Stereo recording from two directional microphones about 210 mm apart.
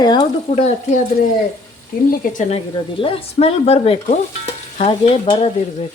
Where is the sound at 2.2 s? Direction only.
40° left (ahead or behind).